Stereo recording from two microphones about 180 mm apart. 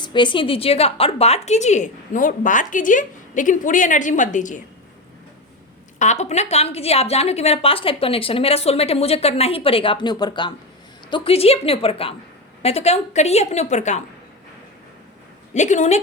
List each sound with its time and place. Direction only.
0.0 s a woman's voice: 25° left (ahead or behind); by 4.6 s 45° left (ahead or behind)
6.0 s a woman's voice: 40° left (ahead or behind)
15.5 s a woman's voice: 40° left (ahead or behind)